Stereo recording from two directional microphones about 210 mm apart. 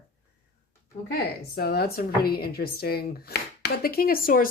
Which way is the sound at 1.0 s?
50° left (ahead or behind).